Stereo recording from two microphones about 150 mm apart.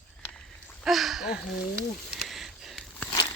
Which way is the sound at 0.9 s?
Centre (ahead or behind).